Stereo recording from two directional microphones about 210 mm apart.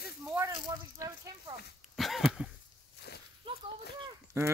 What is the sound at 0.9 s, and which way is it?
Speech, 15° right (ahead or behind).